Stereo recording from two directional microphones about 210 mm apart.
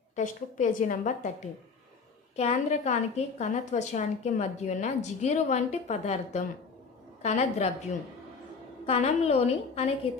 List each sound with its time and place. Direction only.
0.2 s a woman's voice: 40° left (ahead or behind)
8.9 s a woman's voice: 30° left (ahead or behind)